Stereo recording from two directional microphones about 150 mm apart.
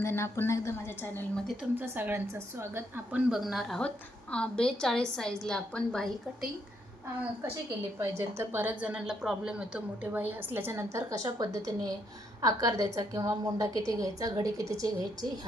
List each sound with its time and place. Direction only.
0.0 s a woman's voice: 15° left (ahead or behind)
1.7 s a woman's voice: 15° right (ahead or behind); by 6.1 s 5° left (ahead or behind)
8.4 s a woman's voice: 15° right (ahead or behind)